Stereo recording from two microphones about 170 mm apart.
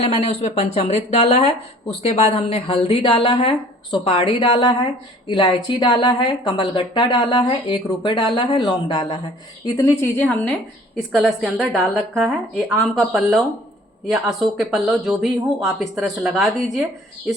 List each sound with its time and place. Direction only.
0.0 s speech: 40° left (ahead or behind)
9.7 s a woman's voice: 15° left (ahead or behind)